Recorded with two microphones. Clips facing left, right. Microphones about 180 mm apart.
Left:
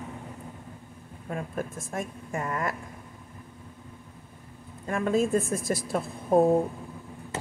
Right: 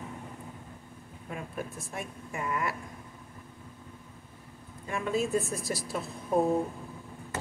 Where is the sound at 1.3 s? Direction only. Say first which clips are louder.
Left 5 dB; 45° left (ahead or behind).